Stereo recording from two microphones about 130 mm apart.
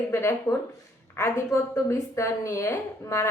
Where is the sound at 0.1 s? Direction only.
20° left (ahead or behind).